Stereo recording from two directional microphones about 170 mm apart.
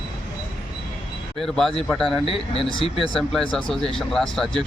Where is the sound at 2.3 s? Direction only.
35° left (ahead or behind).